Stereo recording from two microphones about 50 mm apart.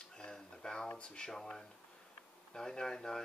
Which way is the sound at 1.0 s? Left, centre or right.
Centre.